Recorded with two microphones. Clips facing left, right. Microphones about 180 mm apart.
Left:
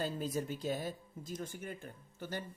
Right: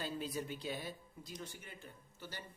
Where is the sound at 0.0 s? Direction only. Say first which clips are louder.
Left 4 dB; 45° left (ahead or behind).